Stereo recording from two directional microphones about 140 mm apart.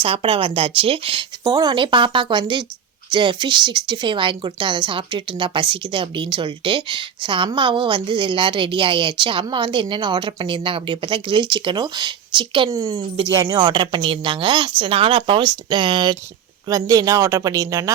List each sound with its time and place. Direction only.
0.0 s speech: 40° right (ahead or behind)
12.7 s speech: 25° right (ahead or behind)